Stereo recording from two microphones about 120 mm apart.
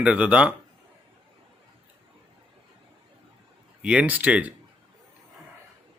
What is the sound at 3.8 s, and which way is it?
Speech, 10° right (ahead or behind).